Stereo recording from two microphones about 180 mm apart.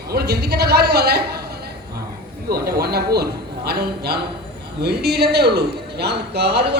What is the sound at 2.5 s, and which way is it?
A man's voice, 60° right (ahead or behind).